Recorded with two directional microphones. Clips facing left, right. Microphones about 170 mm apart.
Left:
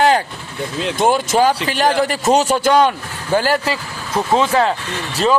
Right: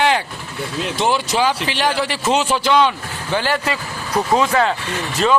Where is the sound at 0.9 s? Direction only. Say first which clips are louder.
Left 4 dB; 50° left (ahead or behind).